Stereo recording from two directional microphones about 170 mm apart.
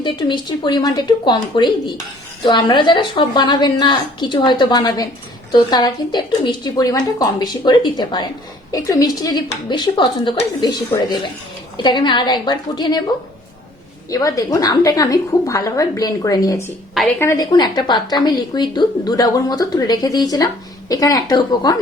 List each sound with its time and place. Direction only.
0.0 s speech: 25° left (ahead or behind)
14.1 s speech: 20° left (ahead or behind)